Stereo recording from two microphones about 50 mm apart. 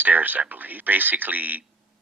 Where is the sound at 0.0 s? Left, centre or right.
Right.